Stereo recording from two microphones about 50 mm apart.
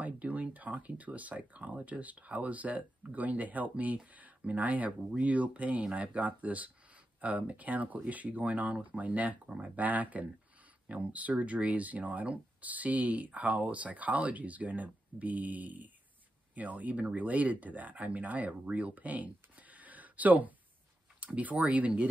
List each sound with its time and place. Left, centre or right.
0.0 s speech: right